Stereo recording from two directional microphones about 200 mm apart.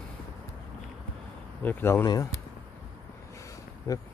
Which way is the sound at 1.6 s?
10° left (ahead or behind).